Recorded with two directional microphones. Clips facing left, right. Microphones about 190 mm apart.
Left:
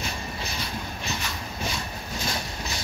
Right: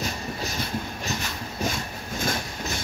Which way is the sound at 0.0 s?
40° right (ahead or behind).